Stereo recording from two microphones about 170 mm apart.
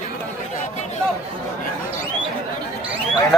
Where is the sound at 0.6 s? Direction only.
40° left (ahead or behind).